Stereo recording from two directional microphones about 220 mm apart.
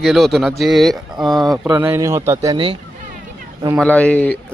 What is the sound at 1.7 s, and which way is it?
Speech, 15° right (ahead or behind).